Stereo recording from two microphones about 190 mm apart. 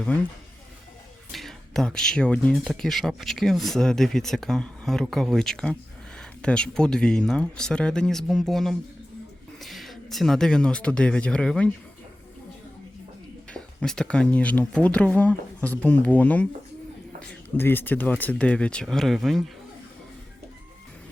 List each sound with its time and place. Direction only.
0.0 s speech: 10° left (ahead or behind)
1.3 s speech: centre (ahead or behind)
13.5 s speech: 5° left (ahead or behind)